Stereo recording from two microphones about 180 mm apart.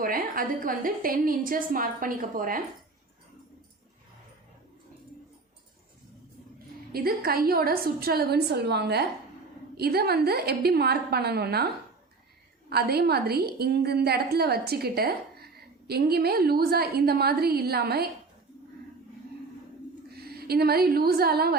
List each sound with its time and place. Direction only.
0.0 s a woman's voice: 50° right (ahead or behind)
6.9 s a woman's voice: 55° right (ahead or behind)
12.7 s a woman's voice: 60° right (ahead or behind)
20.1 s a woman's voice: 60° right (ahead or behind)